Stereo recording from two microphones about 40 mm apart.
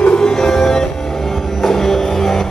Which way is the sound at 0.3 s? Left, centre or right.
Centre.